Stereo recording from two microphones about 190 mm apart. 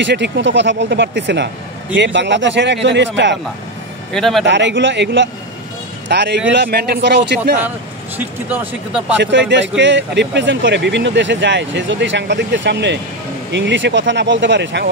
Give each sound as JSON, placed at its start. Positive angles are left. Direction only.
{"t": 0.0, "sound": "speech", "side_deg": -70}
{"t": 4.1, "sound": "speech", "side_deg": 0}
{"t": 4.5, "sound": "a man's voice", "side_deg": -70}
{"t": 9.2, "sound": "speech", "side_deg": -70}